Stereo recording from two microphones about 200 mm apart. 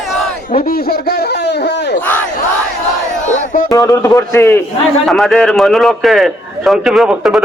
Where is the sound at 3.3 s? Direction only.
45° left (ahead or behind).